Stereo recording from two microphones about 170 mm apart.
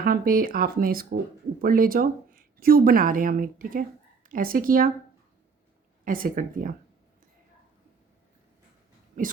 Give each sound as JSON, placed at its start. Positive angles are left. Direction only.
{"t": 0.0, "sound": "a woman's voice", "side_deg": -60}
{"t": 6.1, "sound": "speech", "side_deg": -55}
{"t": 9.2, "sound": "speech", "side_deg": -45}